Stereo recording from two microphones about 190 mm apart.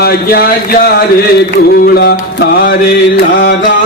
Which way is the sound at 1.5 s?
55° left (ahead or behind).